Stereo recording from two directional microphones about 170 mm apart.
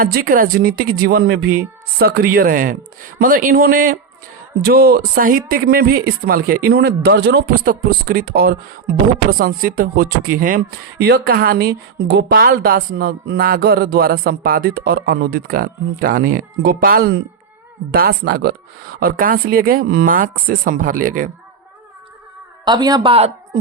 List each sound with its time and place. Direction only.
0.0 s speech: 60° right (ahead or behind)
22.6 s a man's voice: 25° right (ahead or behind)